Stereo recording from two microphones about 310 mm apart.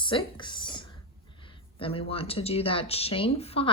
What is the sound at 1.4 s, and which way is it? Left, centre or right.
Speech, centre.